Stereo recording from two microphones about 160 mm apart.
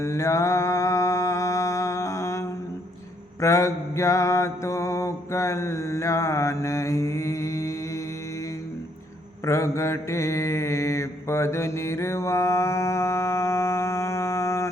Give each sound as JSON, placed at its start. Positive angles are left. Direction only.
{"t": 0.0, "sound": "mantra", "side_deg": 20}
{"t": 9.5, "sound": "mantra", "side_deg": 20}